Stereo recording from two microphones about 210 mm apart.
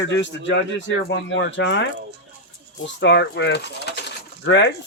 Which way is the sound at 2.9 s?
55° left (ahead or behind).